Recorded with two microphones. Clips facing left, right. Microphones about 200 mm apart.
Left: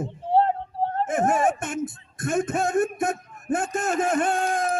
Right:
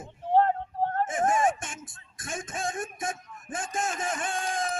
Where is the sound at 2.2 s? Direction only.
60° left (ahead or behind).